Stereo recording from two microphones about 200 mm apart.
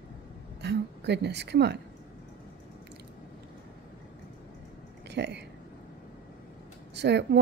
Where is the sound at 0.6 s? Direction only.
60° right (ahead or behind).